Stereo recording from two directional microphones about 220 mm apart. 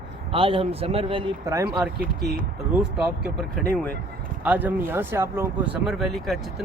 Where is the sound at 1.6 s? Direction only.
5° right (ahead or behind).